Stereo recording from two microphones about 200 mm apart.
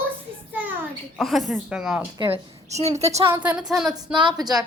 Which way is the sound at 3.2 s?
10° right (ahead or behind).